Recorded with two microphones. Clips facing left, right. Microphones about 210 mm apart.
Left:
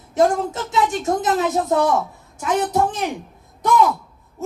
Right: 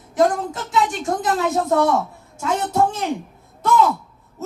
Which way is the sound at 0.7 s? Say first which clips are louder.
Left 1 dB; 20° left (ahead or behind).